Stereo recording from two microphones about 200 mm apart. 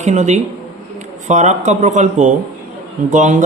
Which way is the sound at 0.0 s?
35° right (ahead or behind).